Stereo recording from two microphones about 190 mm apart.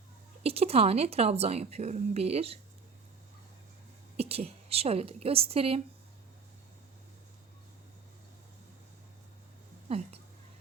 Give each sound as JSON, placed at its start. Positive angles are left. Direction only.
{"t": 0.4, "sound": "speech", "side_deg": -30}
{"t": 4.2, "sound": "speech", "side_deg": -30}
{"t": 9.9, "sound": "speech", "side_deg": -30}